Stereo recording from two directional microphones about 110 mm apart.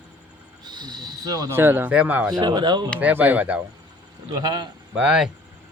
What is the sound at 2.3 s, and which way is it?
Speech, 40° right (ahead or behind).